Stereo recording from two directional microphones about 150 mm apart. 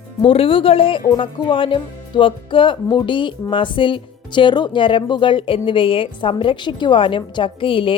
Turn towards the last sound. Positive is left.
turn(degrees=35)  # may be behind; listen again after turning